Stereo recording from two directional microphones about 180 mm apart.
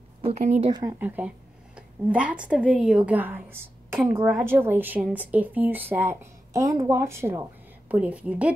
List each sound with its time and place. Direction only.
0.2 s speech: 35° right (ahead or behind)
0.7 s speech: 25° right (ahead or behind)
0.9 s a woman's voice: 10° right (ahead or behind)